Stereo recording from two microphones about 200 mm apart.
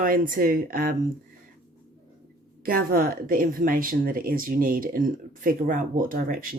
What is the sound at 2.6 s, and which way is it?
Speech, 45° right (ahead or behind).